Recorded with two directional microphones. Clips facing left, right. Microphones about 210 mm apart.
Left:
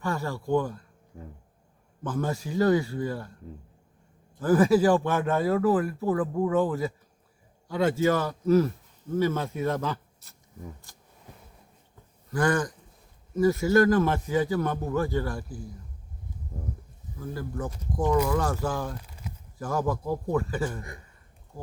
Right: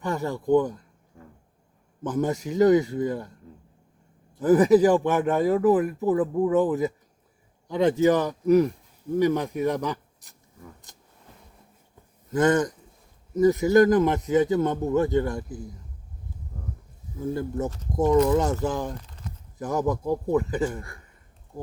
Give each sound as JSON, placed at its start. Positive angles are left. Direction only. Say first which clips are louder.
{"t": 0.0, "sound": "speech", "louder": "right 3 dB", "side_deg": -20}
{"t": 2.0, "sound": "speech", "louder": "right 4 dB", "side_deg": -20}
{"t": 4.4, "sound": "a man's voice", "louder": "right 4 dB", "side_deg": -20}
{"t": 10.9, "sound": "a sound", "louder": "right 1 dB", "side_deg": -20}
{"t": 12.3, "sound": "speech", "louder": "right 4 dB", "side_deg": -20}
{"t": 17.2, "sound": "speech", "louder": "right 6 dB", "side_deg": -25}
{"t": 19.0, "sound": "a sound", "louder": "right 1 dB", "side_deg": 10}
{"t": 19.5, "sound": "speech", "louder": "right 3 dB", "side_deg": -20}